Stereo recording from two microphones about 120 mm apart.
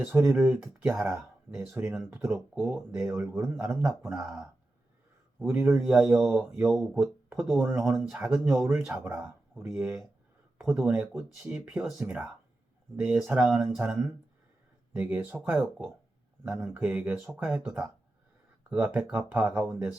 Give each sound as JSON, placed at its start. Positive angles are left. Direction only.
{"t": 0.1, "sound": "speech", "side_deg": -20}
{"t": 0.3, "sound": "speech", "side_deg": -10}
{"t": 0.6, "sound": "speech", "side_deg": -20}
{"t": 3.2, "sound": "speech", "side_deg": -25}
{"t": 3.4, "sound": "speech", "side_deg": -10}
{"t": 5.4, "sound": "speech", "side_deg": -20}
{"t": 5.6, "sound": "speech", "side_deg": -5}
{"t": 7.6, "sound": "speech", "side_deg": -20}
{"t": 7.9, "sound": "speech", "side_deg": -5}
{"t": 8.6, "sound": "speech", "side_deg": -20}
{"t": 10.6, "sound": "speech", "side_deg": -5}